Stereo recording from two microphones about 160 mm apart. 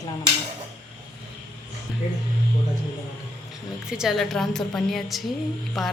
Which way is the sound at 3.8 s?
5° right (ahead or behind).